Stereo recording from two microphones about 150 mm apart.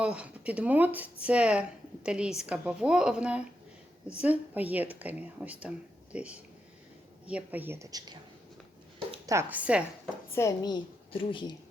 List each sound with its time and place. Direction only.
0.0 s a woman's voice: 10° right (ahead or behind); by 8.2 s 25° right (ahead or behind)
9.2 s a woman's voice: 20° right (ahead or behind)
10.3 s a woman's voice: 25° left (ahead or behind)